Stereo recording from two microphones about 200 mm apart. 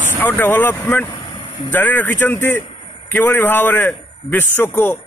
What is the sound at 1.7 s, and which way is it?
A man's voice, 10° left (ahead or behind).